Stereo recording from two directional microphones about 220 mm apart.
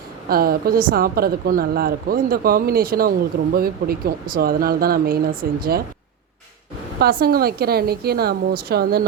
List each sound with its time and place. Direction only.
0.3 s speech: 40° right (ahead or behind)
7.0 s speech: 45° right (ahead or behind)